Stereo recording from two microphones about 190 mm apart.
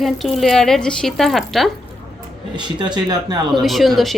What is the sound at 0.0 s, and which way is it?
Speech, centre (ahead or behind).